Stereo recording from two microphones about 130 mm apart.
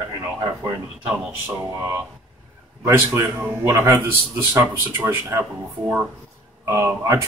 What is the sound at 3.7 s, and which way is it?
Speech, 20° right (ahead or behind).